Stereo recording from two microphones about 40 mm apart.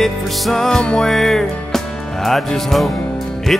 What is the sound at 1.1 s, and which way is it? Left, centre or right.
Music, centre.